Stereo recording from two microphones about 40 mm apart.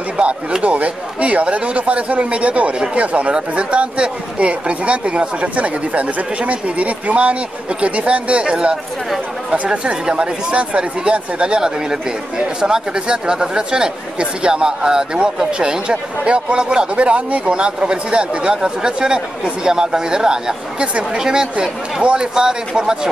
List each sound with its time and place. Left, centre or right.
0.2 s speech: right
0.6 s speech: right; by 20.5 s centre
20.8 s speech: right
21.2 s speech: centre